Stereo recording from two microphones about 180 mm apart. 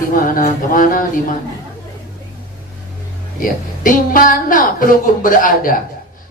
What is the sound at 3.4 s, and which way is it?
A man's voice, 50° left (ahead or behind).